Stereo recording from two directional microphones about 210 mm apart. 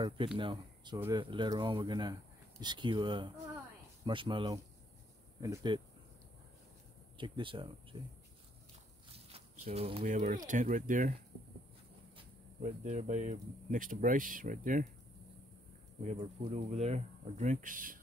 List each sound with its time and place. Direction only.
0.4 s speech: 20° right (ahead or behind)
0.9 s speech: 10° right (ahead or behind)
1.2 s speech: 20° right (ahead or behind)
7.2 s speech: 25° right (ahead or behind)
9.3 s speech: 30° right (ahead or behind)
12.2 s speech: 30° right (ahead or behind)
16.0 s speech: 30° right (ahead or behind)